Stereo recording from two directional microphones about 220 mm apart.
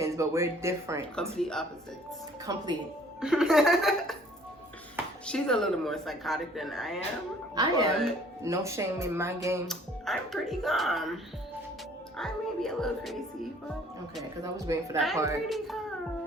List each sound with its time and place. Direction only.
0.0 s speech: 15° right (ahead or behind)
1.1 s speech: 5° left (ahead or behind)
2.5 s speech: 15° right (ahead or behind)
3.2 s speech: centre (ahead or behind)
5.2 s speech: 5° left (ahead or behind)
7.5 s speech: 15° right (ahead or behind)
9.6 s speech: centre (ahead or behind)
14.4 s speech: 15° right (ahead or behind)
14.9 s speech: centre (ahead or behind)